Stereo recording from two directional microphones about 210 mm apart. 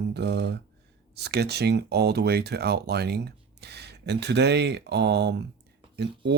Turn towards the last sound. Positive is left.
turn(degrees=-55)  # may be behind; listen again after turning